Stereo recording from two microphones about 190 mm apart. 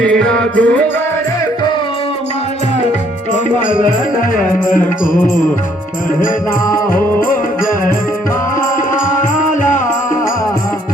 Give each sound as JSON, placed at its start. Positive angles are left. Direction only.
{"t": 0.3, "sound": "music", "side_deg": 5}
{"t": 3.3, "sound": "music", "side_deg": 45}
{"t": 6.9, "sound": "music", "side_deg": 45}